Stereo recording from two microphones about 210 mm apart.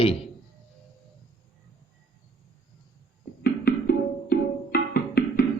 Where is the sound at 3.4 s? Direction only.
45° left (ahead or behind).